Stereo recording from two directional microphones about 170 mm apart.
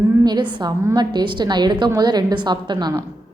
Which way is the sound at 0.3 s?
25° right (ahead or behind).